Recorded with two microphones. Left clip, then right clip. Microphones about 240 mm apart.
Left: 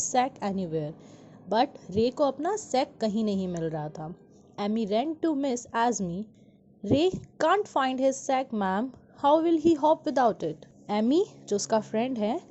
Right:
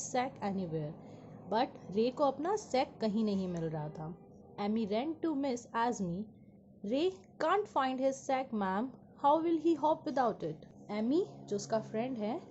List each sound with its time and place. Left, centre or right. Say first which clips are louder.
0.0 s a woman's voice: left 9 dB; left